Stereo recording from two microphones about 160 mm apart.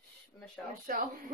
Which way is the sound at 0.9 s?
60° right (ahead or behind).